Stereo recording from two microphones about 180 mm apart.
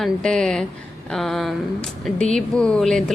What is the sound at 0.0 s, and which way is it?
Speech, 5° left (ahead or behind).